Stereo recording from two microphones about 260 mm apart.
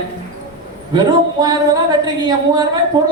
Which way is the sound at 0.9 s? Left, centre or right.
Centre.